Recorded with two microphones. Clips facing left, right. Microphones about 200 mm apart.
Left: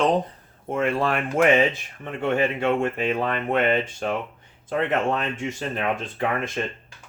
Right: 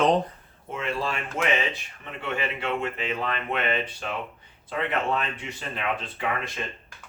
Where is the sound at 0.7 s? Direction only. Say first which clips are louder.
Left 7 dB; 55° left (ahead or behind).